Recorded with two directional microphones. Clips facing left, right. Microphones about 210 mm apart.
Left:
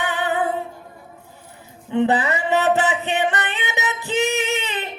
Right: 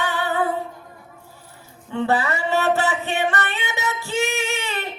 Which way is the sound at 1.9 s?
20° left (ahead or behind).